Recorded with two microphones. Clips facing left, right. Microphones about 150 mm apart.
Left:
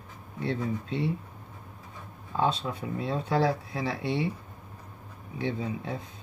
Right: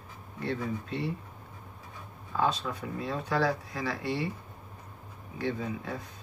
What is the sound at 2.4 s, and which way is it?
Speech, 25° left (ahead or behind).